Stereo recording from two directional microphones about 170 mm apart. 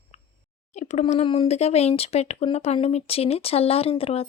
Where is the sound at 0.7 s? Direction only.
40° left (ahead or behind).